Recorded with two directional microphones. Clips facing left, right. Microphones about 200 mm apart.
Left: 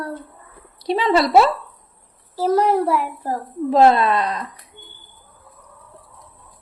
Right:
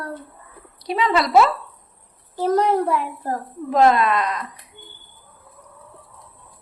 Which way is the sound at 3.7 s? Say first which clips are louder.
Left 2 dB; 30° left (ahead or behind).